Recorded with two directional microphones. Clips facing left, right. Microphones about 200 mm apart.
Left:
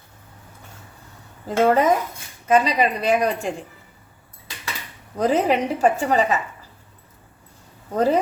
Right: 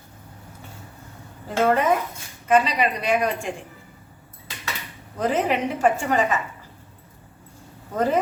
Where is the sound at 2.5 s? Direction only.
40° left (ahead or behind).